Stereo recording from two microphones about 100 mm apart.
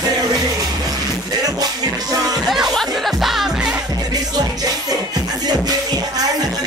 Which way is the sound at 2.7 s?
Centre (ahead or behind).